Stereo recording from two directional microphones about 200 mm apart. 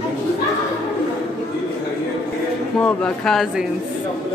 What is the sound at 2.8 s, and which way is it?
Speech, 5° left (ahead or behind).